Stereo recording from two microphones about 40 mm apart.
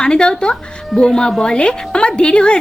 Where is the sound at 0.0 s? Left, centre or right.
Left.